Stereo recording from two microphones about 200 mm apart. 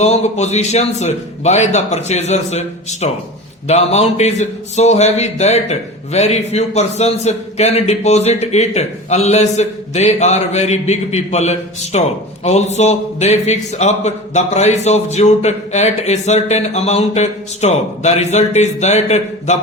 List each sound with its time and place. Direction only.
0.0 s a man's voice: 35° left (ahead or behind)